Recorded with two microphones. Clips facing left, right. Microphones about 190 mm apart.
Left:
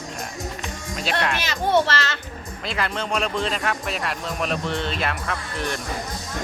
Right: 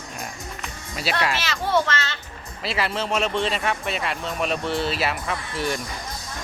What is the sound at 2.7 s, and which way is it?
Speech, 5° right (ahead or behind).